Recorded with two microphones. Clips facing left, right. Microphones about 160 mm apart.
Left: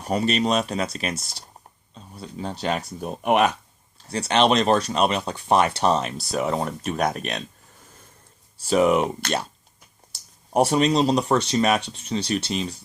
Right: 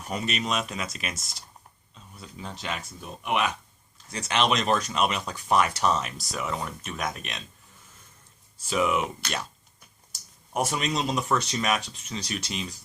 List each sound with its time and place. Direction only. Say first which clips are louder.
0.0 s speech: left 8 dB; 35° left (ahead or behind)
3.9 s speech: left 6 dB; 30° left (ahead or behind)
8.6 s speech: left 7 dB; 40° left (ahead or behind)
10.5 s speech: left 9 dB; 35° left (ahead or behind)